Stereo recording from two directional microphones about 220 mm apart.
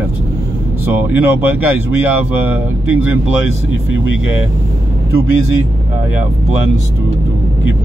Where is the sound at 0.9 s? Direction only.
10° right (ahead or behind).